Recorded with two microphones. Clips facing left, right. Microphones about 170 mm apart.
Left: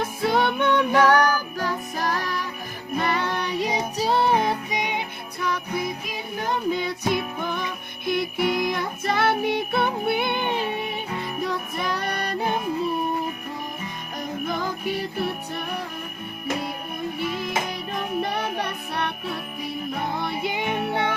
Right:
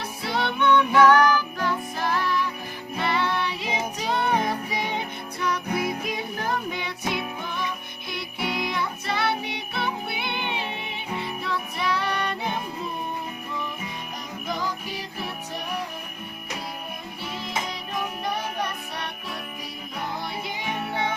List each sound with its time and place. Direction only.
0.0 s music: 50° left (ahead or behind); by 4.5 s 30° left (ahead or behind)
4.7 s music: 15° left (ahead or behind)
6.7 s music: 35° left (ahead or behind)
14.4 s music: 55° left (ahead or behind)
18.2 s music: 60° left (ahead or behind)
20.1 s music: 55° left (ahead or behind)